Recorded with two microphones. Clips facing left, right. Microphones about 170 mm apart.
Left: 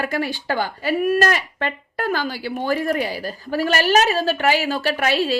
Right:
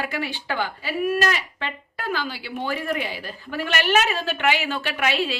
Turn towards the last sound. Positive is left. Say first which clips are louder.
# left 4 dB
turn(degrees=40)  # may be behind; listen again after turning